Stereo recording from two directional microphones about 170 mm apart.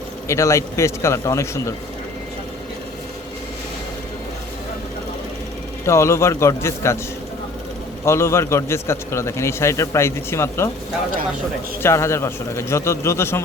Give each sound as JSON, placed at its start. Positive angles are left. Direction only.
{"t": 0.3, "sound": "a man's voice", "side_deg": 15}
{"t": 5.8, "sound": "a man's voice", "side_deg": 15}
{"t": 8.0, "sound": "a man's voice", "side_deg": 15}
{"t": 11.8, "sound": "a man's voice", "side_deg": 15}